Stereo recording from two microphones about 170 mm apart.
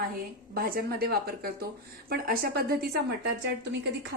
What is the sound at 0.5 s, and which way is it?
A woman's voice, 60° right (ahead or behind).